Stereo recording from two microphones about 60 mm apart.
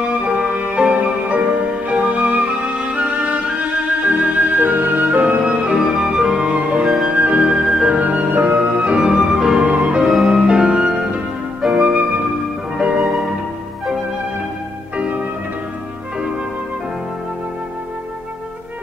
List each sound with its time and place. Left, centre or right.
0.2 s music: right
5.4 s music: centre
8.0 s music: right; by 9.6 s centre
9.6 s music: right
10.0 s music: centre
11.6 s flute: centre
12.7 s music: centre
13.0 s music: centre
15.0 s music: right